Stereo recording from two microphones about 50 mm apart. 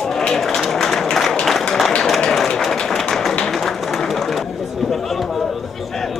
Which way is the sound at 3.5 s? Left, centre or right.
Centre.